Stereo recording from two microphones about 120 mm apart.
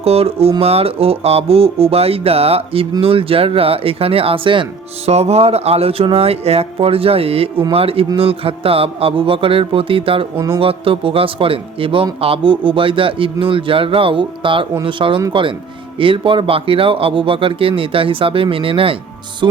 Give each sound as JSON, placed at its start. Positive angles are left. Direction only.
{"t": 0.0, "sound": "speech", "side_deg": -55}
{"t": 5.0, "sound": "speech", "side_deg": -60}
{"t": 19.4, "sound": "music", "side_deg": -40}